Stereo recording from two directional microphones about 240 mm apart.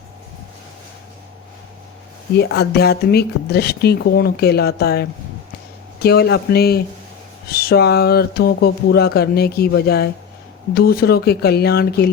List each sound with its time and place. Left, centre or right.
2.6 s speech: left